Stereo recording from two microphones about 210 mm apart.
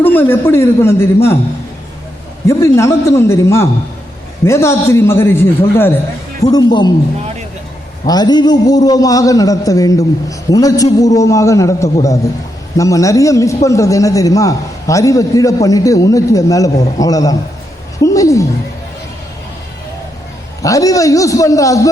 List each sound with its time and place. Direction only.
0.0 s a man's voice: 10° left (ahead or behind)
2.5 s a man's voice: 15° left (ahead or behind)
8.0 s a man's voice: 20° left (ahead or behind)
20.6 s a man's voice: 15° left (ahead or behind)